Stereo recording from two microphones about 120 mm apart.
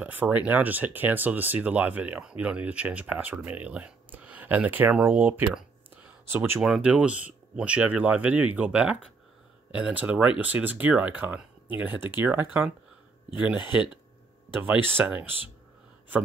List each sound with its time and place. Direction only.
0.0 s speech: 15° right (ahead or behind)
6.6 s speech: 5° right (ahead or behind)
14.5 s speech: 15° right (ahead or behind)